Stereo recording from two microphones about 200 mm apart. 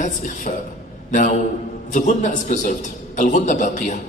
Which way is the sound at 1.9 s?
40° left (ahead or behind).